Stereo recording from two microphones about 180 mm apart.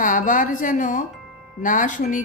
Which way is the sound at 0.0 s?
50° left (ahead or behind).